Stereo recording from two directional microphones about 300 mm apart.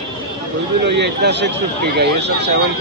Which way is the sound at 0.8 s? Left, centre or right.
Right.